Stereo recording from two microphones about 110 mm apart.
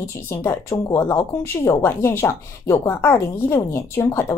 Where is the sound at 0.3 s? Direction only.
25° left (ahead or behind).